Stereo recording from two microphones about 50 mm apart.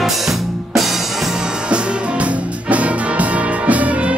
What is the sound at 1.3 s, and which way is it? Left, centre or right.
Music, centre.